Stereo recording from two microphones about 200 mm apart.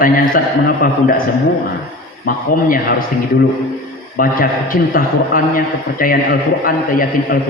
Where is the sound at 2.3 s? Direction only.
45° left (ahead or behind).